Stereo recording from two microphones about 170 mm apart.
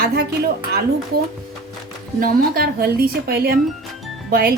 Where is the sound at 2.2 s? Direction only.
60° right (ahead or behind).